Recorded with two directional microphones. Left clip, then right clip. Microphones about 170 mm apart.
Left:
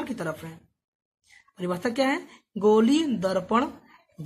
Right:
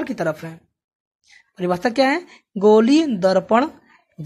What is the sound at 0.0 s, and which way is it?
Speech, 35° right (ahead or behind).